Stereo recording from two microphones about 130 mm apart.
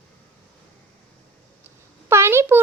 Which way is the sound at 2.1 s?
20° right (ahead or behind).